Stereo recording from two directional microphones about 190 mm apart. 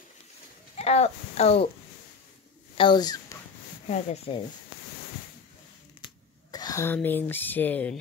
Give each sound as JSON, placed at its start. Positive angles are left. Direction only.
{"t": 0.7, "sound": "speech", "side_deg": 35}
{"t": 2.8, "sound": "speech", "side_deg": 20}
{"t": 3.8, "sound": "speech", "side_deg": 35}
{"t": 6.5, "sound": "speech", "side_deg": 20}